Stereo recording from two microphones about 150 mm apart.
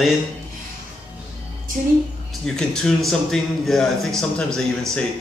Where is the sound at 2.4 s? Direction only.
5° left (ahead or behind).